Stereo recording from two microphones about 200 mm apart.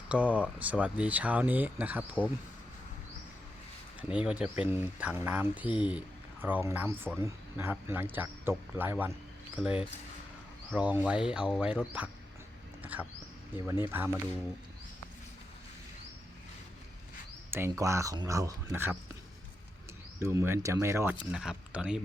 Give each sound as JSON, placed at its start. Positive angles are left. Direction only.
{"t": 0.1, "sound": "speech", "side_deg": -5}
{"t": 4.1, "sound": "speech", "side_deg": -5}
{"t": 12.8, "sound": "a sound", "side_deg": -10}
{"t": 13.7, "sound": "speech", "side_deg": -15}
{"t": 17.5, "sound": "speech", "side_deg": -15}
{"t": 20.2, "sound": "speech", "side_deg": -10}